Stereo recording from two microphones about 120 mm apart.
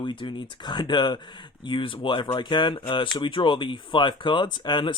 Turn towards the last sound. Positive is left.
turn(degrees=40)  # may be behind; listen again after turning